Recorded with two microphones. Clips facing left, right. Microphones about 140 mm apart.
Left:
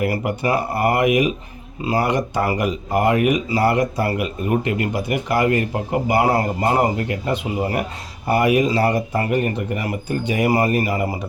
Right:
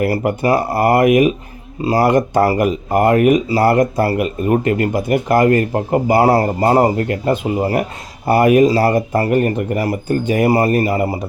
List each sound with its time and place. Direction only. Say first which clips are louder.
0.1 s speech: right 5 dB; 40° right (ahead or behind)
1.0 s speech: right 6 dB; 50° right (ahead or behind)
1.8 s speech: right 5 dB; 35° right (ahead or behind)
2.0 s speech: right 7 dB; 50° right (ahead or behind); by 6.9 s 35° right (ahead or behind)
6.9 s speech: right 5 dB; 45° right (ahead or behind)
10.4 s speech: right 3 dB; 30° right (ahead or behind)